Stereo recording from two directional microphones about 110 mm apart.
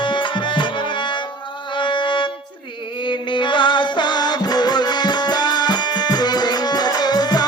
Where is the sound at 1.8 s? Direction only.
45° left (ahead or behind).